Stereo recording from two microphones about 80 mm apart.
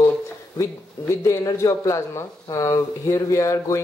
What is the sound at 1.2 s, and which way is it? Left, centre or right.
Speech, left.